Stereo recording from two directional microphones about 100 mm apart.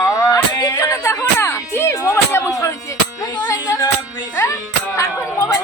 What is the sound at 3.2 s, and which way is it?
Music, 40° left (ahead or behind).